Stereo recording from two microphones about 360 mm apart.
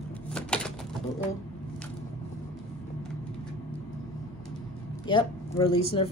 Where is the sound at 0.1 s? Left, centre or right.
Centre.